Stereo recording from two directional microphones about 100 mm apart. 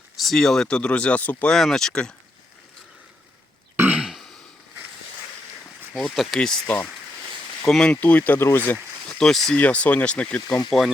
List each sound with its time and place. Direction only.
0.2 s speech: 5° left (ahead or behind)
1.5 s speech: 5° left (ahead or behind)
3.8 s throat clearing: 20° right (ahead or behind)
4.0 s throat clearing: centre (ahead or behind)
5.9 s speech: centre (ahead or behind)
7.7 s speech: 10° left (ahead or behind)
9.0 s speech: 5° left (ahead or behind)
10.7 s speech: centre (ahead or behind)